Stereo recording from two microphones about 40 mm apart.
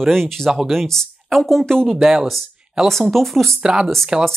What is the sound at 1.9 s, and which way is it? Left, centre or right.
Speech, centre.